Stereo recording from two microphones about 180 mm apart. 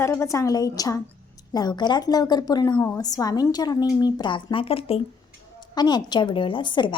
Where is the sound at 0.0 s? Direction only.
15° left (ahead or behind).